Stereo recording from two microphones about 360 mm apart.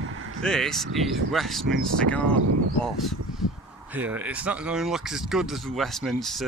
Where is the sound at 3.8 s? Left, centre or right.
Centre.